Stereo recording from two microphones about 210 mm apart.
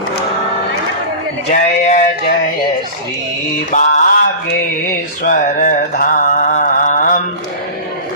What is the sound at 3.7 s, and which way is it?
Mantra, 35° left (ahead or behind).